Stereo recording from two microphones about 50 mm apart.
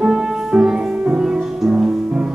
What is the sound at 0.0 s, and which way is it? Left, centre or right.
Music, centre.